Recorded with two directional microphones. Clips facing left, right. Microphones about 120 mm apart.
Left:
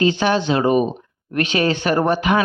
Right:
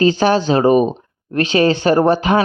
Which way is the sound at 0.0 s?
40° right (ahead or behind).